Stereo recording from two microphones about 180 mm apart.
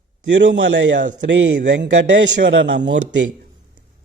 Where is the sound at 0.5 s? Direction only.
90° right.